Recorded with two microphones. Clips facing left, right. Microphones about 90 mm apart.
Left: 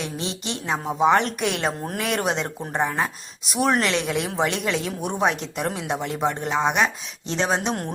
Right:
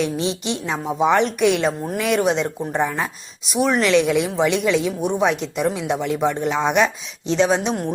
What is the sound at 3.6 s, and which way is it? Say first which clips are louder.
Speech: right 2 dB; 45° left (ahead or behind).